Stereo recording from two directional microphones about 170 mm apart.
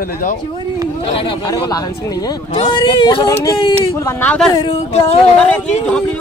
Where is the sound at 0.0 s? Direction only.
55° left (ahead or behind).